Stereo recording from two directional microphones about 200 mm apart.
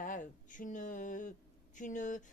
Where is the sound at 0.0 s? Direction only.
40° left (ahead or behind).